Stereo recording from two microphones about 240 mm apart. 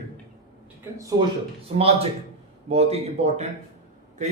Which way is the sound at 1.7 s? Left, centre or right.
Right.